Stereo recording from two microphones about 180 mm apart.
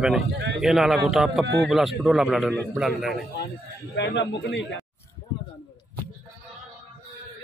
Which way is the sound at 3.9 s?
75° left (ahead or behind).